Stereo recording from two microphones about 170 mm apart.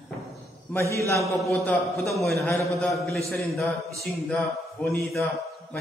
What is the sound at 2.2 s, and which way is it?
Speech, 15° left (ahead or behind).